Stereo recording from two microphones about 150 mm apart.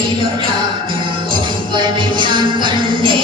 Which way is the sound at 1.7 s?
30° right (ahead or behind).